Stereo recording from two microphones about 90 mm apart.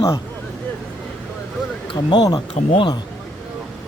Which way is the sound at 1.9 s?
65° left (ahead or behind).